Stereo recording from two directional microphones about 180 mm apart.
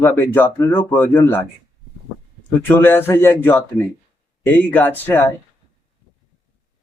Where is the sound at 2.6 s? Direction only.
10° left (ahead or behind).